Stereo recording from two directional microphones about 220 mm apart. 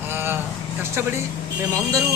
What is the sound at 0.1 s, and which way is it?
Vehicle, 10° right (ahead or behind).